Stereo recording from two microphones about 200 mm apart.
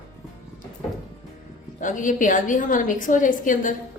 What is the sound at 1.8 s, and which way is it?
A woman's voice, 40° left (ahead or behind).